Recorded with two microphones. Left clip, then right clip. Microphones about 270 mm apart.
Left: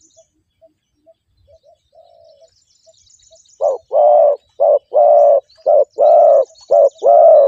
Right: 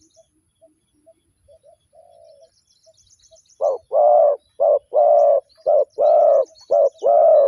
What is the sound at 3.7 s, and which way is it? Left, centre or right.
Bird, left.